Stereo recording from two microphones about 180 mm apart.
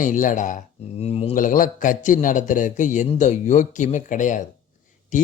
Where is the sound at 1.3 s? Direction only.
50° left (ahead or behind).